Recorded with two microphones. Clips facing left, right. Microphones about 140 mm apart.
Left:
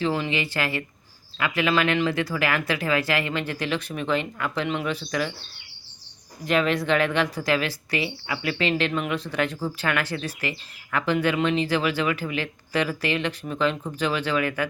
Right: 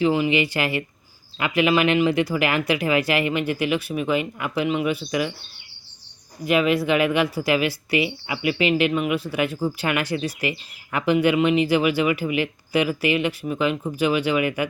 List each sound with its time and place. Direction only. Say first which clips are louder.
0.0 s speech: right 6 dB; 10° right (ahead or behind)
6.4 s speech: right 3 dB; 10° right (ahead or behind)